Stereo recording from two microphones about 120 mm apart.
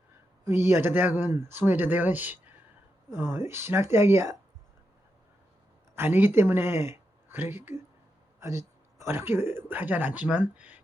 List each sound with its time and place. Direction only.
0.4 s speech: 20° right (ahead or behind)
3.1 s speech: 35° left (ahead or behind)
3.3 s speech: 20° right (ahead or behind)
6.0 s speech: 20° right (ahead or behind)